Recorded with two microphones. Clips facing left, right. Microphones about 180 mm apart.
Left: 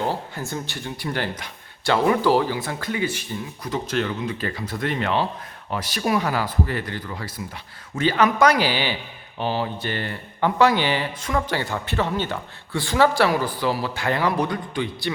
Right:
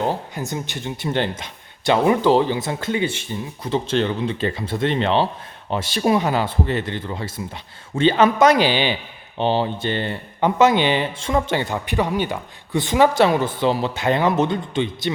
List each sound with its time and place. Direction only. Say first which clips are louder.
0.0 s speech: right 3 dB; 20° right (ahead or behind)